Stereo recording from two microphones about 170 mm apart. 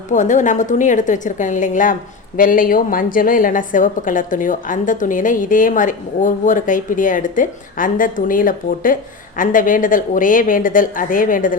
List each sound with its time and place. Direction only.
0.1 s a woman's voice: 45° left (ahead or behind)